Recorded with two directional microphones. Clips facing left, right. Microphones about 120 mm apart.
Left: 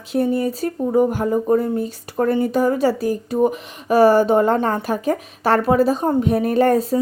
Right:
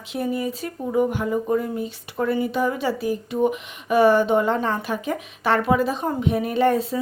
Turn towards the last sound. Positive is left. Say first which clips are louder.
# left 4 dB
turn(degrees=40)  # may be behind; listen again after turning